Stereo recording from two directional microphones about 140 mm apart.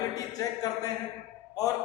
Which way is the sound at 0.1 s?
25° left (ahead or behind).